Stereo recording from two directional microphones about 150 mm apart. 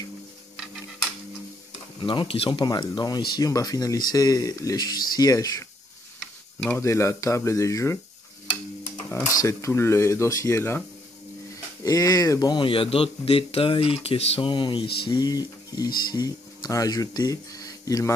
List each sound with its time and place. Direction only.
2.0 s speech: 35° left (ahead or behind); by 10.8 s 15° left (ahead or behind)
11.8 s speech: 25° left (ahead or behind)